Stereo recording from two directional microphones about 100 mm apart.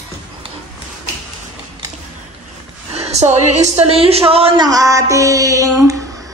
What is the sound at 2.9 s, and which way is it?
A woman's voice, 90° right.